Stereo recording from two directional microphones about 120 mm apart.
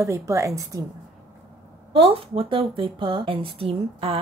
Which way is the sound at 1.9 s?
50° right (ahead or behind).